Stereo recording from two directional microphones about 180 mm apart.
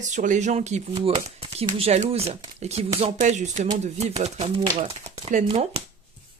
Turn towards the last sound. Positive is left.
turn(degrees=-35)  # may be behind; listen again after turning